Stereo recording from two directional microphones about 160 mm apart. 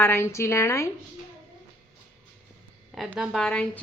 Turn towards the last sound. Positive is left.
turn(degrees=5)  # may be behind; listen again after turning